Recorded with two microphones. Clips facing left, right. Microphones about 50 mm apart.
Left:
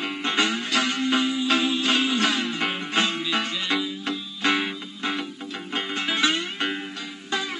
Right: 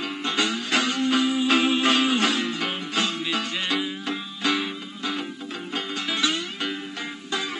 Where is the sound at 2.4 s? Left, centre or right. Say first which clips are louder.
Left 1 dB; left.